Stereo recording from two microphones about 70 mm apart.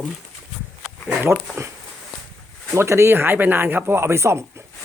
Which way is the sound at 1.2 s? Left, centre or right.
Right.